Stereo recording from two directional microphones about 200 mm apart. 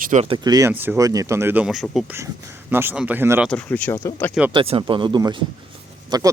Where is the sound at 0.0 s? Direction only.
35° right (ahead or behind).